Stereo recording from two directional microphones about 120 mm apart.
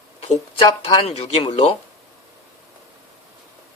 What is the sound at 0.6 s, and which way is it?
Speech, 45° left (ahead or behind).